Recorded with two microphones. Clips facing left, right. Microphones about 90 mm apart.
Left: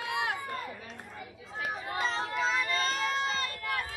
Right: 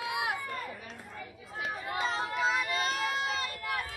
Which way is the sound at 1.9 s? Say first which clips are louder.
Even; 10° right (ahead or behind).